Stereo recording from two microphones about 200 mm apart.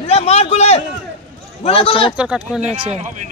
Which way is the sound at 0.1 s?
30° left (ahead or behind).